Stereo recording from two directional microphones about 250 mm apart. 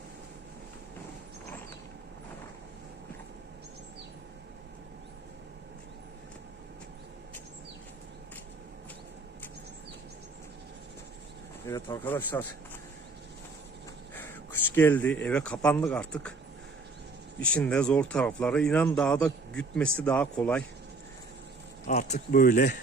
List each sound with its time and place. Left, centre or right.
11.6 s speech: centre
14.2 s speech: centre
17.4 s speech: centre
21.8 s speech: left